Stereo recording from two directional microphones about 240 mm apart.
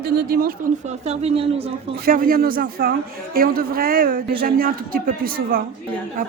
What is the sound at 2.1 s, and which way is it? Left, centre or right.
A woman's voice, right.